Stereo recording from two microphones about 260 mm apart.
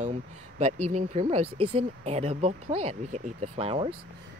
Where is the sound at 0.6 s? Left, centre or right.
Right.